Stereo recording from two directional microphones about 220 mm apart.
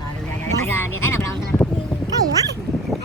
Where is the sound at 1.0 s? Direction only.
10° left (ahead or behind).